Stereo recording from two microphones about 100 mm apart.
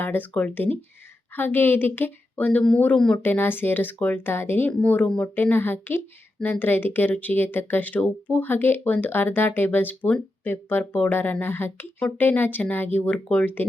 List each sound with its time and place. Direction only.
0.0 s speech: 20° left (ahead or behind)